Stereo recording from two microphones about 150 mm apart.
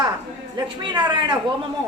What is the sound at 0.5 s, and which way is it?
Speech, 30° right (ahead or behind).